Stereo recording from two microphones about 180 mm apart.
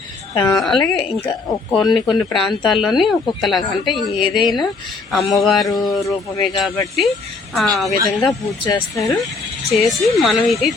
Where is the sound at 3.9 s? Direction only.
25° left (ahead or behind).